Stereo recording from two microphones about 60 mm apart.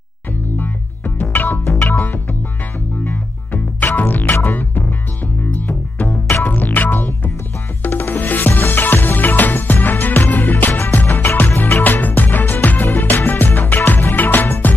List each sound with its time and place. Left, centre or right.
0.6 s music: left
11.0 s music: left